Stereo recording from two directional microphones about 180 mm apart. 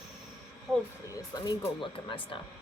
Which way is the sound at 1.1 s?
20° left (ahead or behind).